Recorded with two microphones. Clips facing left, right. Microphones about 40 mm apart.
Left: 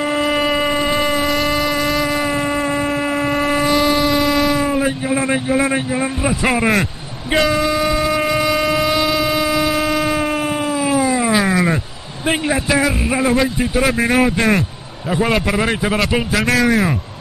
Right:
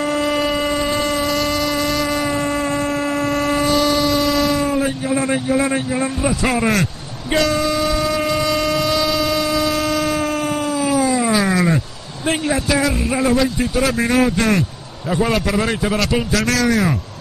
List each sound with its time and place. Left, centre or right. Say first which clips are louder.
0.0 s insect: left 1 dB; left
2.4 s a sound: left 1 dB; centre
7.3 s train: left 2 dB; left
12.3 s a man's voice: left 1 dB; centre